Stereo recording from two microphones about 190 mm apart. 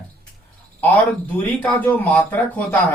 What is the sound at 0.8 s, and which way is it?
Speech, 10° left (ahead or behind).